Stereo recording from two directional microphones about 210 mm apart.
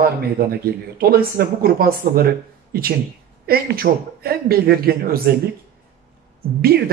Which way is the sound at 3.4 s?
45° right (ahead or behind).